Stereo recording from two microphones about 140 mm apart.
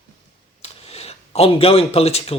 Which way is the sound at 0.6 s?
45° left (ahead or behind).